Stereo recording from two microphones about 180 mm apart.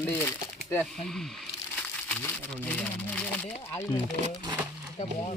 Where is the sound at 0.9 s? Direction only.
Centre (ahead or behind).